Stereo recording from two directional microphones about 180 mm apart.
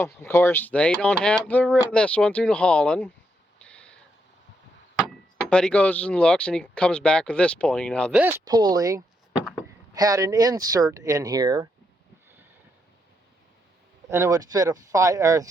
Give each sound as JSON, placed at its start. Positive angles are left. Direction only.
{"t": 0.2, "sound": "speech", "side_deg": 15}
{"t": 3.6, "sound": "a sound", "side_deg": 5}
{"t": 4.9, "sound": "speech", "side_deg": 5}
{"t": 8.1, "sound": "speech", "side_deg": -10}
{"t": 8.4, "sound": "speech", "side_deg": -20}
{"t": 14.1, "sound": "speech", "side_deg": -20}